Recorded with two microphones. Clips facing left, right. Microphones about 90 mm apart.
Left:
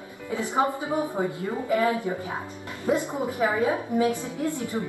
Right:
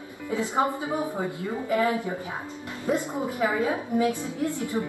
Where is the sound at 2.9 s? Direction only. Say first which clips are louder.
Left 2 dB; 20° left (ahead or behind).